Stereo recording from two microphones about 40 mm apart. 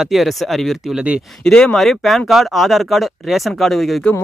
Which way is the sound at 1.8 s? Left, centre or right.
Centre.